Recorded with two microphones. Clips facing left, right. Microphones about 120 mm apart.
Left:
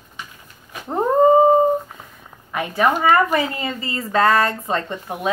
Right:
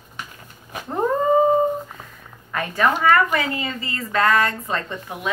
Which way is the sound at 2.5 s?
15° left (ahead or behind).